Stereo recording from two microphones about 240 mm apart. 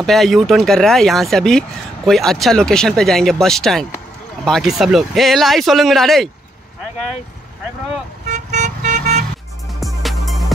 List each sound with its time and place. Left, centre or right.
0.0 s speech: centre
8.3 s vehicle: right
9.8 s music: centre